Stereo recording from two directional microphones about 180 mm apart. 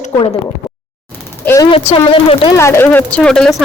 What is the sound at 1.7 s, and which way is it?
Speech, 30° left (ahead or behind).